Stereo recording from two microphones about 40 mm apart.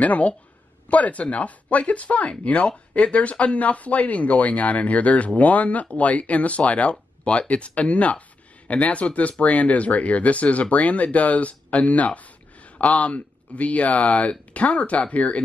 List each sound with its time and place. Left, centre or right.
0.0 s speech: left